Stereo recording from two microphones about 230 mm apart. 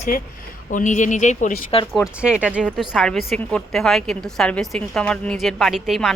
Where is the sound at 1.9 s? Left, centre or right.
Centre.